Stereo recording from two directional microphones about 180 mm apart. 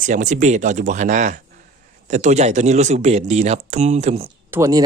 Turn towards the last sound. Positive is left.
turn(degrees=-20)  # may be behind; listen again after turning